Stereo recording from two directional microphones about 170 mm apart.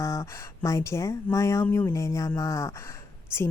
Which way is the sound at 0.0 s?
20° left (ahead or behind).